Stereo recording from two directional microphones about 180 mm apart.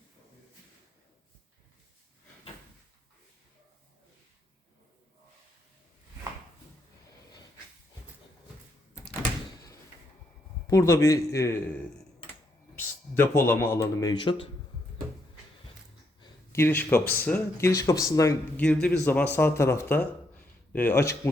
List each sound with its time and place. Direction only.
10.7 s speech: 15° left (ahead or behind)
13.1 s speech: 15° left (ahead or behind); by 14.4 s 30° left (ahead or behind)
16.2 s a sound: 15° left (ahead or behind)
17.2 s speech: 10° left (ahead or behind)